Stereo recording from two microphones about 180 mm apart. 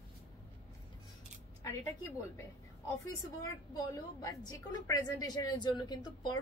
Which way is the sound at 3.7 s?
20° left (ahead or behind).